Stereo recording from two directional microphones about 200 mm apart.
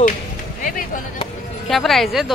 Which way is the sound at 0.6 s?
45° left (ahead or behind).